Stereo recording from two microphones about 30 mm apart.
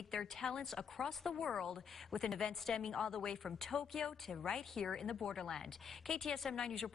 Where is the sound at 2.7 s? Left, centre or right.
Left.